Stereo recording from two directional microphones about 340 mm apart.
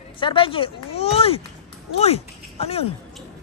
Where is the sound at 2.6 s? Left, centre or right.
Centre.